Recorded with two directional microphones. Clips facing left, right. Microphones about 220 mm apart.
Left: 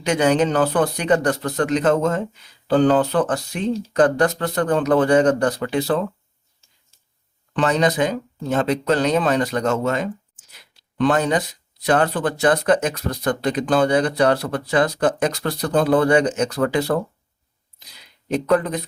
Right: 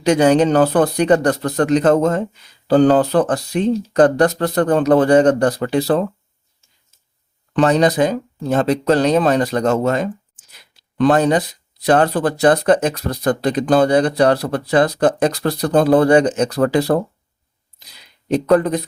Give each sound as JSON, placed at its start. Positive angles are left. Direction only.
{"t": 0.0, "sound": "speech", "side_deg": -35}
{"t": 7.5, "sound": "speech", "side_deg": -35}
{"t": 18.3, "sound": "speech", "side_deg": -35}